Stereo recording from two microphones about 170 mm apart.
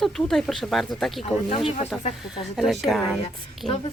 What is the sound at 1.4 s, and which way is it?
Speech, 35° left (ahead or behind).